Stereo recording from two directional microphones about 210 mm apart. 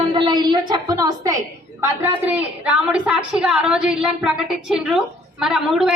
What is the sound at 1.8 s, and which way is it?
A woman's voice, 10° right (ahead or behind).